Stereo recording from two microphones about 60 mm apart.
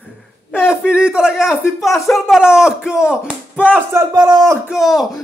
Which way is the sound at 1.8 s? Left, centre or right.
Centre.